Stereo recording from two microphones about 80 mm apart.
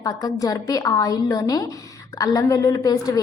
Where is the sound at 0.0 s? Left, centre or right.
Left.